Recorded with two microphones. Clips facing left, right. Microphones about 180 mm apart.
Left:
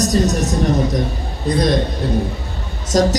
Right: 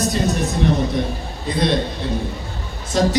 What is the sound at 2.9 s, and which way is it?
Speech, 40° left (ahead or behind).